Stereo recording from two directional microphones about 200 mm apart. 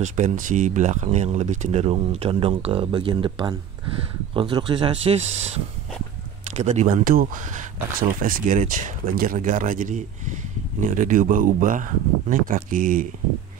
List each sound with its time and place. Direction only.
0.0 s speech: 35° right (ahead or behind)